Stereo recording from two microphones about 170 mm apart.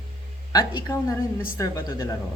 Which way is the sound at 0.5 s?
25° left (ahead or behind).